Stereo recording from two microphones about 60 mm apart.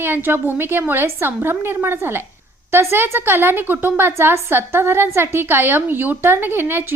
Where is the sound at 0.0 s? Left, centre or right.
Right.